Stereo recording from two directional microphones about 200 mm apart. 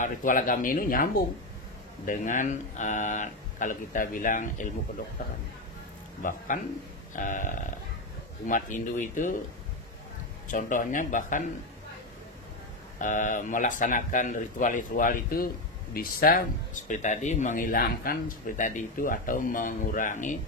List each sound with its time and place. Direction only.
0.0 s speech: 40° left (ahead or behind)
6.2 s speech: 40° left (ahead or behind)
10.5 s speech: 40° left (ahead or behind)
13.0 s speech: 40° left (ahead or behind)